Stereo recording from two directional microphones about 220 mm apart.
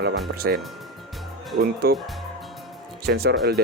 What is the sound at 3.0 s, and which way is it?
Speech, 45° right (ahead or behind).